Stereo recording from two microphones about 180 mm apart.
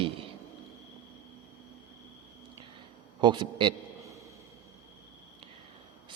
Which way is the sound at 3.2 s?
25° right (ahead or behind).